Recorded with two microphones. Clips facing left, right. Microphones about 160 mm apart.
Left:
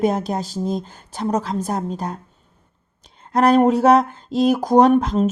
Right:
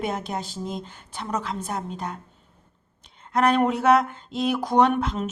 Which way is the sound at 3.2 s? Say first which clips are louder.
Left 6 dB; 35° left (ahead or behind).